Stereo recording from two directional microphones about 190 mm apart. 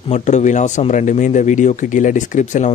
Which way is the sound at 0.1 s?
40° left (ahead or behind).